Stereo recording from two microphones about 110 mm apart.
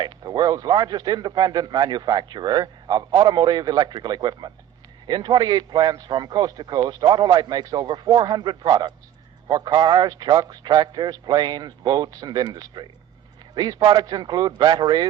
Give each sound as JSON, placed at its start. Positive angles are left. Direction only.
{"t": 0.0, "sound": "a man's voice", "side_deg": -40}